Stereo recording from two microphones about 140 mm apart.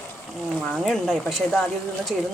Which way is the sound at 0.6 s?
Centre (ahead or behind).